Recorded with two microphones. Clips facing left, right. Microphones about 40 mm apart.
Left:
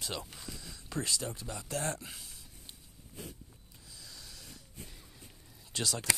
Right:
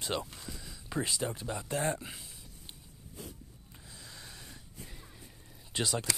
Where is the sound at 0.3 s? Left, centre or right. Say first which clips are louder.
Right 1 dB; centre.